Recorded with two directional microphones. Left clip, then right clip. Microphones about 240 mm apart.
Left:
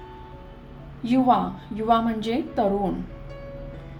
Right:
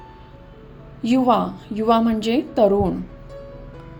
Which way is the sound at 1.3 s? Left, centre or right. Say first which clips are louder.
Right 3 dB; right.